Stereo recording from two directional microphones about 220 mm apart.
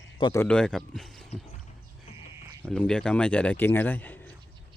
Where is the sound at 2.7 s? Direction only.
5° left (ahead or behind).